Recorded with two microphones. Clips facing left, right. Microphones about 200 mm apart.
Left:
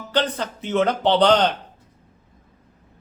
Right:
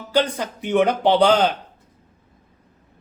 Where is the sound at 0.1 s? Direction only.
10° right (ahead or behind).